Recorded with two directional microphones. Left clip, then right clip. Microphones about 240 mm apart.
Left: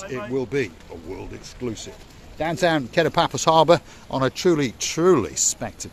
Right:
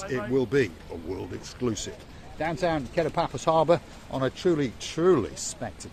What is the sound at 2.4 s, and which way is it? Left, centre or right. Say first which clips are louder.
Speech: left 6 dB; left.